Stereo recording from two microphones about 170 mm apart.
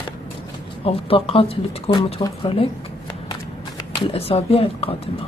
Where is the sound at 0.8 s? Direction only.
35° left (ahead or behind).